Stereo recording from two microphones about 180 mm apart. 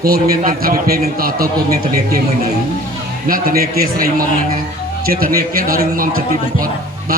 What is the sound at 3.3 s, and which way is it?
Speech, 55° right (ahead or behind).